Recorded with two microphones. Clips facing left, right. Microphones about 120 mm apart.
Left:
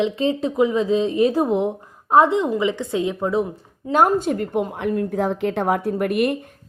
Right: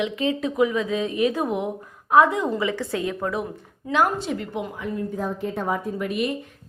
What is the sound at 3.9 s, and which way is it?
A woman's voice, 45° left (ahead or behind).